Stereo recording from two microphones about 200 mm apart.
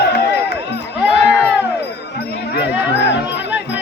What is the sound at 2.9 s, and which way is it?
Music, 60° left (ahead or behind).